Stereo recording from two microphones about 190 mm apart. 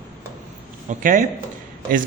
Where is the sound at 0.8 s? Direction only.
45° right (ahead or behind).